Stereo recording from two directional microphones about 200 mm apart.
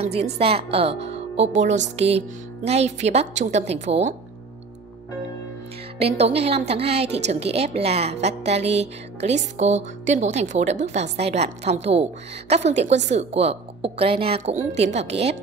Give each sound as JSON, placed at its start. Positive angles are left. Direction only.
{"t": 0.0, "sound": "a woman's voice", "side_deg": -30}
{"t": 5.9, "sound": "a woman's voice", "side_deg": -30}
{"t": 12.8, "sound": "a woman's voice", "side_deg": -60}
{"t": 13.1, "sound": "a woman's voice", "side_deg": -35}